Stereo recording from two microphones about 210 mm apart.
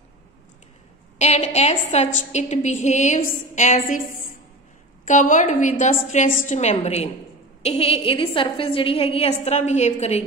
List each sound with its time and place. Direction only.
1.1 s a woman's voice: 30° left (ahead or behind)
5.0 s a woman's voice: 35° left (ahead or behind)